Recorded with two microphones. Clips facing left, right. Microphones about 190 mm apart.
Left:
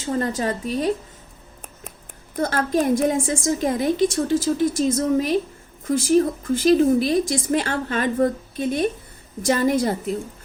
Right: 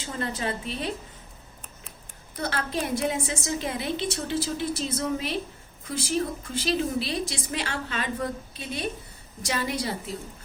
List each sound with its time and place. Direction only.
0.0 s a woman's voice: 40° left (ahead or behind)
2.3 s a woman's voice: 45° left (ahead or behind)